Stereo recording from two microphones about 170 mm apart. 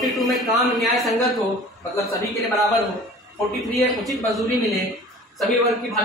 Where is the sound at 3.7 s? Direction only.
Centre (ahead or behind).